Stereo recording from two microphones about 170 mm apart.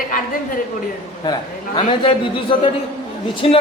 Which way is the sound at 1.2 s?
25° left (ahead or behind).